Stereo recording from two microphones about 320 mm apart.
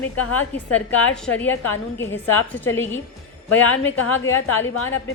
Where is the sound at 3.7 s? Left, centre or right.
Left.